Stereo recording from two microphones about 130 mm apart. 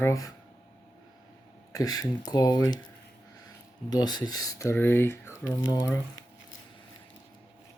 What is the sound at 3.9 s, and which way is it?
Speech, 30° left (ahead or behind).